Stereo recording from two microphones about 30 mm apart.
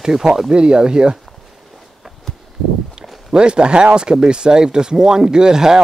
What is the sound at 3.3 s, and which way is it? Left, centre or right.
Speech, right.